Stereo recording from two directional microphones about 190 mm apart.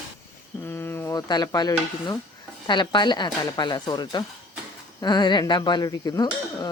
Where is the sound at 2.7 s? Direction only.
25° left (ahead or behind).